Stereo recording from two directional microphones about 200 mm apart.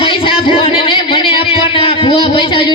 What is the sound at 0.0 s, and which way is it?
Music, 25° left (ahead or behind).